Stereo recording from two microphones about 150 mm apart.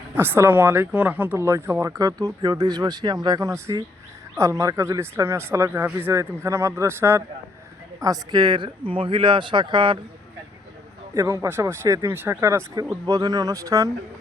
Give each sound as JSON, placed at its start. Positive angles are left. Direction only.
{"t": 0.2, "sound": "speech", "side_deg": -15}
{"t": 11.1, "sound": "speech", "side_deg": -20}